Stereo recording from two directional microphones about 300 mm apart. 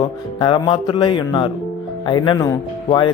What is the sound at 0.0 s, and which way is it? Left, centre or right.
Speech, centre.